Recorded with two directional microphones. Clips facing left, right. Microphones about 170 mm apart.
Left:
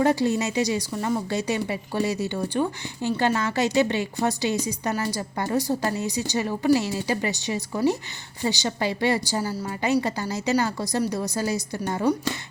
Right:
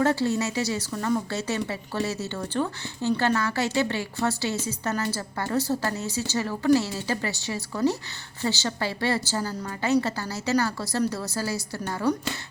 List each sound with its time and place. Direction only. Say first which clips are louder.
0.0 s a woman's voice: left 2 dB; 15° left (ahead or behind)